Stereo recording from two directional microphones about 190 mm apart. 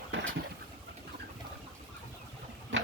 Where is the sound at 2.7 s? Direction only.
75° right (ahead or behind).